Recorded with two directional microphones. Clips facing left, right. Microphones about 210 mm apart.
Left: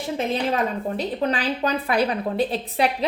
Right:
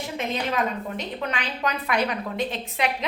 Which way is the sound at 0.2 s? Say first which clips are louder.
Left 3 dB; 35° left (ahead or behind).